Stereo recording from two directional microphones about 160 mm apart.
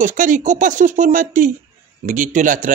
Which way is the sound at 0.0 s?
55° right (ahead or behind).